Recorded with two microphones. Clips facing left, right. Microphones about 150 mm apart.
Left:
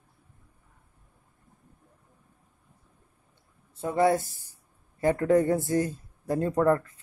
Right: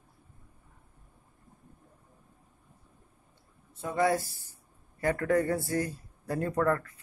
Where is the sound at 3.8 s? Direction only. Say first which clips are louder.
Left 4 dB; 30° left (ahead or behind).